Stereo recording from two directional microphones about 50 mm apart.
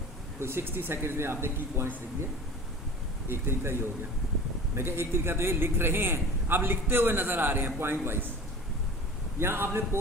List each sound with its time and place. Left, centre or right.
0.3 s speech: right
3.2 s a man's voice: right
9.4 s speech: right